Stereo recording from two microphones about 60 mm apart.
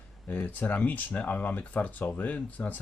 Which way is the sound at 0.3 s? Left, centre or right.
Left.